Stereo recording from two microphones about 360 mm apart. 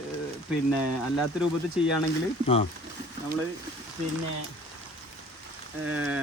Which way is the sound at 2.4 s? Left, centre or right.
Centre.